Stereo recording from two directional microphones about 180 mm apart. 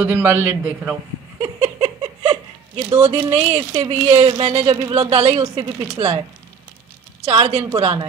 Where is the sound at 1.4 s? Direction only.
35° right (ahead or behind).